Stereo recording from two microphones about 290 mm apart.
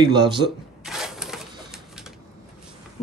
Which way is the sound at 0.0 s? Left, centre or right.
Centre.